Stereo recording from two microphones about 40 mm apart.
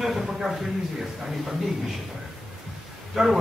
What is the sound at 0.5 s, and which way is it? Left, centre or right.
Speech, centre.